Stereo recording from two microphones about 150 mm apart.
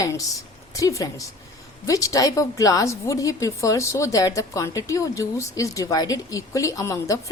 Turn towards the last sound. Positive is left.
turn(degrees=20)  # may be behind; listen again after turning